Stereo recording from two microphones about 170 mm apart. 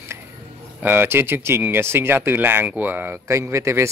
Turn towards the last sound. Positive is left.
turn(degrees=-15)  # may be behind; listen again after turning